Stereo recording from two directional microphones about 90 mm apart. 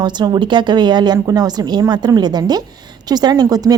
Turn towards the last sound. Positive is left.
turn(degrees=-45)  # may be behind; listen again after turning